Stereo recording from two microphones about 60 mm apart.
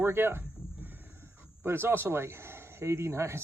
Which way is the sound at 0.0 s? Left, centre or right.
Right.